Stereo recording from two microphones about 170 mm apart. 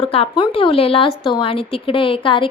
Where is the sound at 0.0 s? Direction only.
35° left (ahead or behind).